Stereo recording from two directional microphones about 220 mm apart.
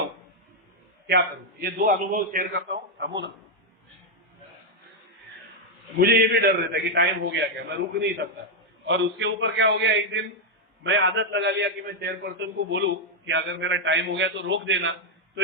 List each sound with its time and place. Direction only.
1.0 s a man's voice: 45° right (ahead or behind)
6.0 s a man's voice: 45° right (ahead or behind)